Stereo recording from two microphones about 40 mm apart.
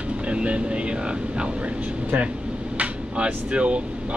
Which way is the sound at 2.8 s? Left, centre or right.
Right.